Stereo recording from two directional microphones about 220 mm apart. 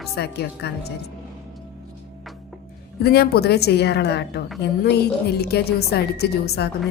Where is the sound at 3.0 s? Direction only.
45° left (ahead or behind).